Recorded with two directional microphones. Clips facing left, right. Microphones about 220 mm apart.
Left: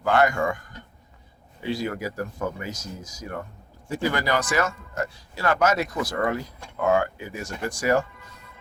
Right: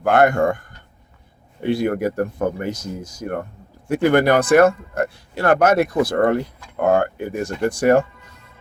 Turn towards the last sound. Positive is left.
turn(degrees=-55)  # may be behind; listen again after turning